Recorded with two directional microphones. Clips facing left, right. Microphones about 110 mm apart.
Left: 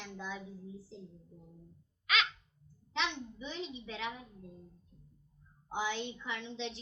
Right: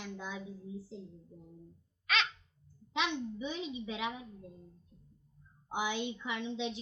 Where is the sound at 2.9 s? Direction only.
15° right (ahead or behind).